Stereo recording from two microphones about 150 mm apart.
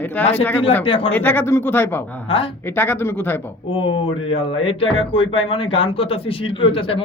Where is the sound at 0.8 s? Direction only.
35° left (ahead or behind).